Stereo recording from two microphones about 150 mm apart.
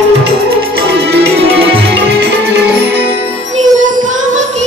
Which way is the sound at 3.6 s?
55° right (ahead or behind).